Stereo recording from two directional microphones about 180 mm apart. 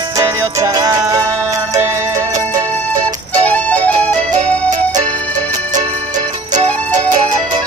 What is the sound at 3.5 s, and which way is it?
Music, 10° left (ahead or behind).